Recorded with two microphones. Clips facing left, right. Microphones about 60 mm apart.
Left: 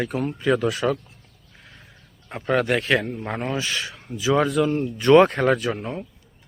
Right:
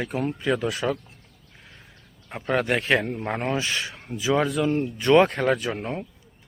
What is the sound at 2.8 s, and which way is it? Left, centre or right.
Speech, centre.